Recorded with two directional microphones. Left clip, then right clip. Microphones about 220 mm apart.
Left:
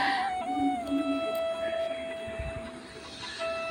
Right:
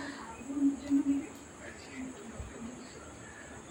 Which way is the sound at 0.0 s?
35° left (ahead or behind).